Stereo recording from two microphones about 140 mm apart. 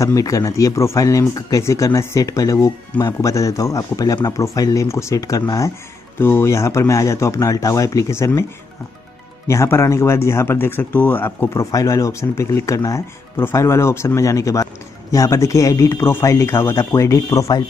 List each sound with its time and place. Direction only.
0.0 s speech: 25° left (ahead or behind)
9.5 s speech: 20° left (ahead or behind)